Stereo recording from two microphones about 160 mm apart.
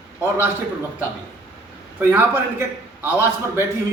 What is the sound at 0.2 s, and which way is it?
Speech, 15° right (ahead or behind).